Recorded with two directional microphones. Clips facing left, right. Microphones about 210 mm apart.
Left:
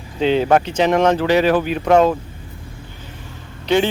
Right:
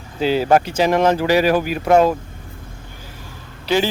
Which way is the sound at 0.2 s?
5° right (ahead or behind).